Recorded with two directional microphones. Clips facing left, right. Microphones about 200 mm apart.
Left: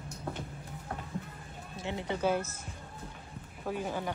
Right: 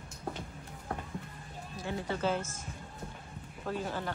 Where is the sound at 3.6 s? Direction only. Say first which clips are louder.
Left 1 dB; 15° left (ahead or behind).